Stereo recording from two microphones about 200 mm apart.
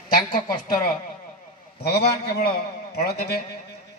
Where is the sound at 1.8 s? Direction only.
55° left (ahead or behind).